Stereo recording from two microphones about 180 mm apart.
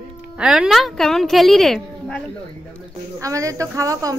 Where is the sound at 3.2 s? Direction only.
20° right (ahead or behind).